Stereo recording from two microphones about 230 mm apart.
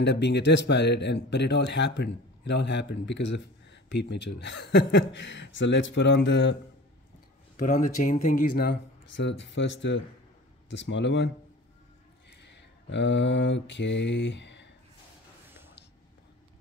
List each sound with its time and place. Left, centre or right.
0.0 s speech: left
7.5 s speech: left
12.3 s mantra: left